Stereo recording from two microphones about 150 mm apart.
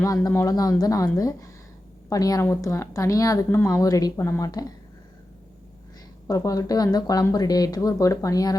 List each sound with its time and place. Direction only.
0.0 s speech: 20° left (ahead or behind)
6.2 s speech: 20° left (ahead or behind)